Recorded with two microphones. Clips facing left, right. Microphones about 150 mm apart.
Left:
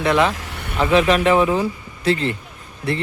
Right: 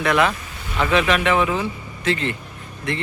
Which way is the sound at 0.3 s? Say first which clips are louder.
Left 3 dB; 75° left (ahead or behind).